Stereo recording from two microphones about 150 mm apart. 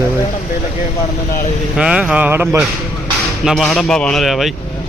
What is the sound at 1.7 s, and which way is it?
Speech, 5° right (ahead or behind).